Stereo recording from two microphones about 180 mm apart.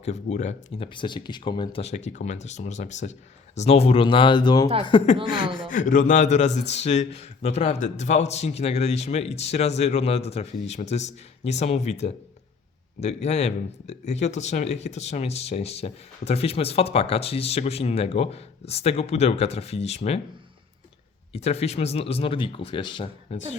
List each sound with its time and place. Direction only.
0.0 s speech: 40° left (ahead or behind)
0.9 s speech: 25° left (ahead or behind)
5.3 s speech: 25° right (ahead or behind)
5.5 s a man's voice: 50° left (ahead or behind)
21.3 s speech: 35° left (ahead or behind)